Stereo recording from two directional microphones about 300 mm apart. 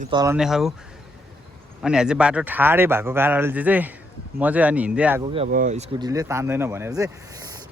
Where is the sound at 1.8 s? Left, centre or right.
Centre.